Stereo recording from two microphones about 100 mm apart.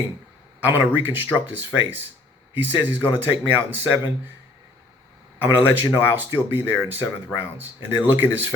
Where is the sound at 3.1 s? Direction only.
20° right (ahead or behind).